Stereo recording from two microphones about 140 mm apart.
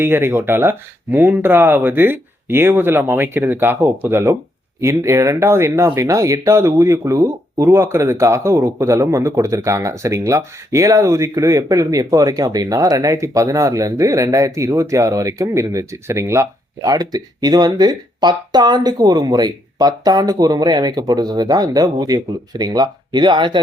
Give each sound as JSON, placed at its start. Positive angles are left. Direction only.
{"t": 0.0, "sound": "speech", "side_deg": -15}